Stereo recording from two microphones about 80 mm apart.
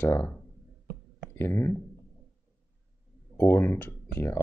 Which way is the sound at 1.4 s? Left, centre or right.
Left.